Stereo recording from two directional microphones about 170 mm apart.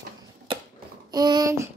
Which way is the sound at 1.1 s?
25° right (ahead or behind).